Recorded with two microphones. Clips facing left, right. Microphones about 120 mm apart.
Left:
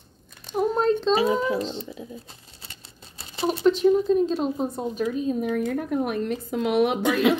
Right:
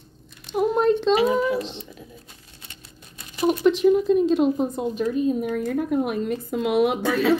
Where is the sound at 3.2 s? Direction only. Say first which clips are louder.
Right 4 dB; 30° left (ahead or behind).